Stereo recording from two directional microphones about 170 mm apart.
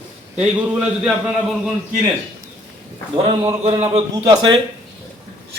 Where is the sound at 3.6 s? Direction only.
35° right (ahead or behind).